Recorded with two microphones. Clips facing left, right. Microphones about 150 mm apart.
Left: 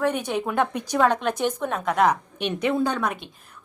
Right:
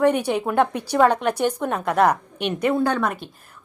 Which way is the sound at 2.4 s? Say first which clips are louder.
Right 3 dB; 55° right (ahead or behind).